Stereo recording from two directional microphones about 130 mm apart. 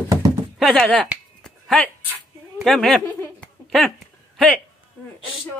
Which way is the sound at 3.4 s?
Centre (ahead or behind).